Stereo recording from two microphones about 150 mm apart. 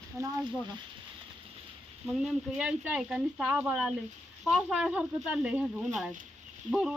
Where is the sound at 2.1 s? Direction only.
5° right (ahead or behind).